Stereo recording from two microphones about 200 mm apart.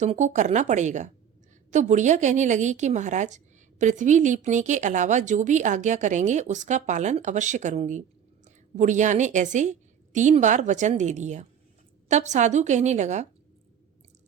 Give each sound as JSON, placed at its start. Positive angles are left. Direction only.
{"t": 0.0, "sound": "a woman's voice", "side_deg": -35}